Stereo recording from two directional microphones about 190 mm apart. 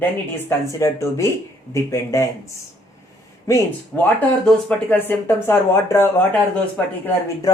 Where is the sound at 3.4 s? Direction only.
10° left (ahead or behind).